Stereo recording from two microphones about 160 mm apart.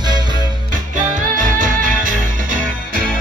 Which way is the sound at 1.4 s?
55° right (ahead or behind).